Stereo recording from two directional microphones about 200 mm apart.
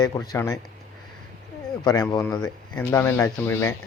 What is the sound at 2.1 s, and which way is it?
Speech, 15° left (ahead or behind).